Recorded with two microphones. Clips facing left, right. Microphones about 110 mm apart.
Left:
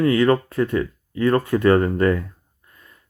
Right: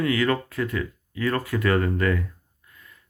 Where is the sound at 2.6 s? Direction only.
30° left (ahead or behind).